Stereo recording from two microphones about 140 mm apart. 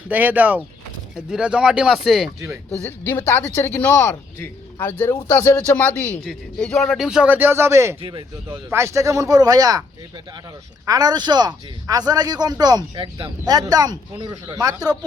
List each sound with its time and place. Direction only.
0.1 s speech: 10° right (ahead or behind)
2.7 s a man's voice: 15° left (ahead or behind); by 9.8 s 25° right (ahead or behind)
10.8 s a man's voice: 25° right (ahead or behind)